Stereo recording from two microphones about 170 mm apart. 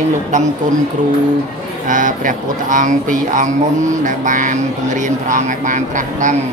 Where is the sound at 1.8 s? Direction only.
50° right (ahead or behind).